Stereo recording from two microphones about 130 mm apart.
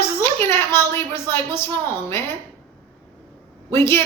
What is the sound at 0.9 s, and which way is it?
A woman's voice, 20° left (ahead or behind).